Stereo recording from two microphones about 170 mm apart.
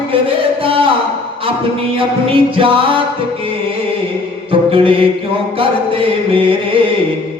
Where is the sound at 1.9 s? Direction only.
30° right (ahead or behind).